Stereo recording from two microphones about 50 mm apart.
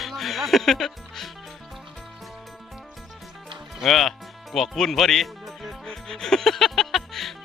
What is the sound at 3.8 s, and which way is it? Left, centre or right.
Speech, centre.